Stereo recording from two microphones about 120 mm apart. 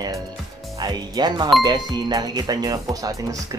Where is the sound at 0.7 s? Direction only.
35° right (ahead or behind).